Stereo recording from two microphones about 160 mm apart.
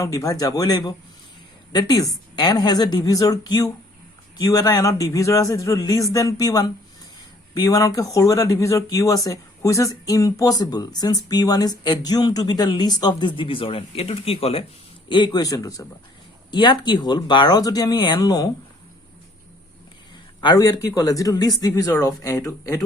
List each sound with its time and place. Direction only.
0.0 s speech: 20° left (ahead or behind)
20.4 s speech: 25° left (ahead or behind)